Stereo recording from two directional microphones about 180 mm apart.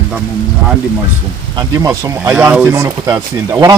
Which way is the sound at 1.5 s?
20° right (ahead or behind).